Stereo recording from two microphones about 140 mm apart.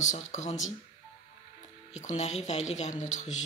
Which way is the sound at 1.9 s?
55° left (ahead or behind).